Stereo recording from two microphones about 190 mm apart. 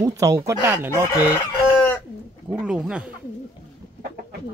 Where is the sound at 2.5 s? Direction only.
5° right (ahead or behind).